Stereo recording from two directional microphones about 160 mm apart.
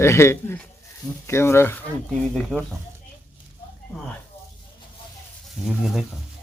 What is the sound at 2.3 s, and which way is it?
Speech, centre (ahead or behind).